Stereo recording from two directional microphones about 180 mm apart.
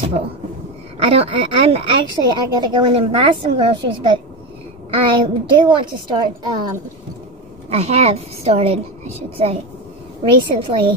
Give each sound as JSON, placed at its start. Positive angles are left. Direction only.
{"t": 1.0, "sound": "speech", "side_deg": -30}
{"t": 7.7, "sound": "a woman's voice", "side_deg": -35}